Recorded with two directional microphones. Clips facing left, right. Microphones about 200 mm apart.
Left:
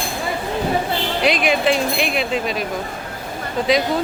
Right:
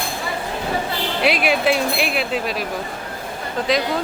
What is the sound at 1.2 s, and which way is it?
Music, 5° right (ahead or behind).